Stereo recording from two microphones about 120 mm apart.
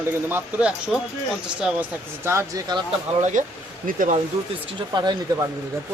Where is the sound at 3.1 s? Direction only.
75° right (ahead or behind).